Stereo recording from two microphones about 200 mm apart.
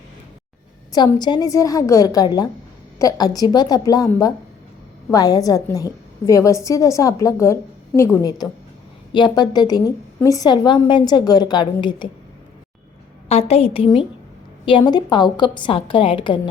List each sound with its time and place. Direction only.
0.9 s a woman's voice: 20° left (ahead or behind)
13.2 s a woman's voice: 30° left (ahead or behind)